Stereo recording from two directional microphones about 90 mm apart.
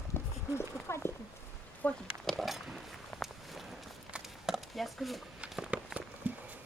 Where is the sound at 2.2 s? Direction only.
Centre (ahead or behind).